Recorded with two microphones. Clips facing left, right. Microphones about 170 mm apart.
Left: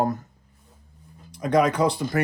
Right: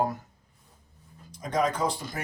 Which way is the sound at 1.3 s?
70° left (ahead or behind).